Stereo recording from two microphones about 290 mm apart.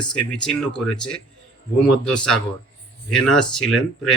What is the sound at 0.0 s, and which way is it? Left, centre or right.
Speech, centre.